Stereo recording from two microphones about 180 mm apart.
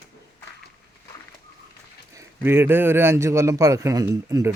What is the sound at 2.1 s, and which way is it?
Speech, 10° right (ahead or behind).